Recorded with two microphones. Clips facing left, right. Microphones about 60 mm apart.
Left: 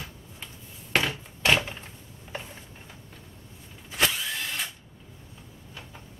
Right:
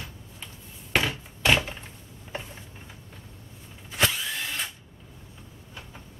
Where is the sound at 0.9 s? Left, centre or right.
Centre.